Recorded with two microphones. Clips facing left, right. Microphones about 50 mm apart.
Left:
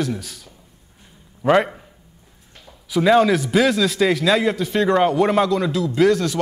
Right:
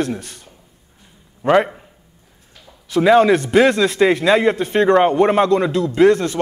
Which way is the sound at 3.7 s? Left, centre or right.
Right.